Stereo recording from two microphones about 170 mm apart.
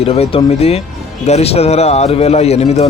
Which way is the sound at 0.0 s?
35° left (ahead or behind).